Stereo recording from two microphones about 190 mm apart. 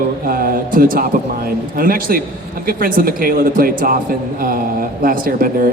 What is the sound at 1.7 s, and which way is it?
A man's voice, 50° right (ahead or behind).